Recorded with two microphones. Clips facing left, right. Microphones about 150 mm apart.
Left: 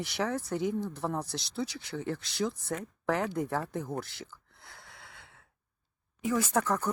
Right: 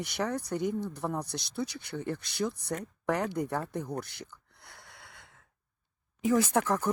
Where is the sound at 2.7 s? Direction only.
Centre (ahead or behind).